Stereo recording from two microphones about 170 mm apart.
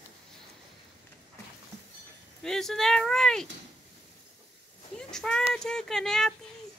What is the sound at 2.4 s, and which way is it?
Speech, centre (ahead or behind).